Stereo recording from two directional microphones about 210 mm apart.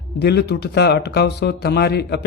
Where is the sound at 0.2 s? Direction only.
50° left (ahead or behind).